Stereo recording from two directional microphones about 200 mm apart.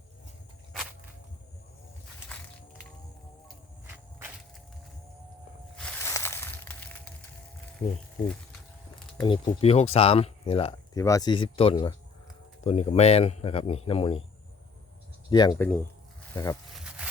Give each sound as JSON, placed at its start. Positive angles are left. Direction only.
{"t": 2.3, "sound": "crushing", "side_deg": 5}
{"t": 5.7, "sound": "a sound", "side_deg": 10}
{"t": 9.2, "sound": "speech", "side_deg": 25}
{"t": 10.9, "sound": "speech", "side_deg": 15}
{"t": 15.3, "sound": "speech", "side_deg": 20}